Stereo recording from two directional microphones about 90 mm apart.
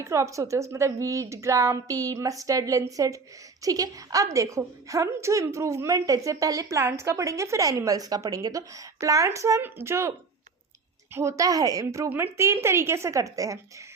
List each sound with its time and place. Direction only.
0.0 s a woman's voice: 35° right (ahead or behind)
9.6 s a woman's voice: 25° right (ahead or behind)
12.0 s a woman's voice: 25° right (ahead or behind); by 13.8 s 40° right (ahead or behind)